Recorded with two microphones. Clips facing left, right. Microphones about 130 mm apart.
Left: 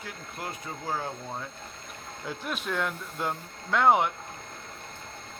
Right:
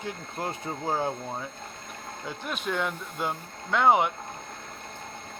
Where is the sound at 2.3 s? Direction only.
Centre (ahead or behind).